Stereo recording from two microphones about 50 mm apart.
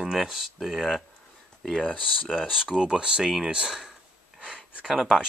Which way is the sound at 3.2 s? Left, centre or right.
Centre.